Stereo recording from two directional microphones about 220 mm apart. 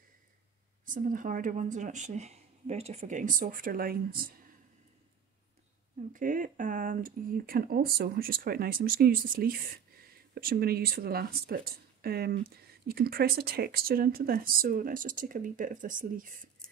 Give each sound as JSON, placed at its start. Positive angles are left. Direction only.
{"t": 0.8, "sound": "speech", "side_deg": -40}
{"t": 6.1, "sound": "speech", "side_deg": -35}
{"t": 16.6, "sound": "a sound", "side_deg": 5}